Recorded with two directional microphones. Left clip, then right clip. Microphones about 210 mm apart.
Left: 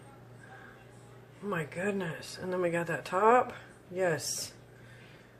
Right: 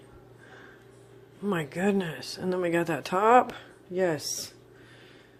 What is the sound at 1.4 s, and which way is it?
Speech, 40° right (ahead or behind).